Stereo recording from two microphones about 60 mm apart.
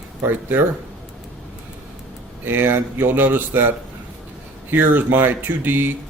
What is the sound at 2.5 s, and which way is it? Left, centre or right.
Speech, right.